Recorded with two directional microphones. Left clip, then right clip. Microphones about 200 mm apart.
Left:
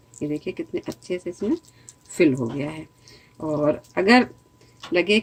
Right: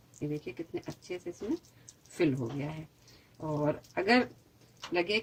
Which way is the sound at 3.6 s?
35° left (ahead or behind).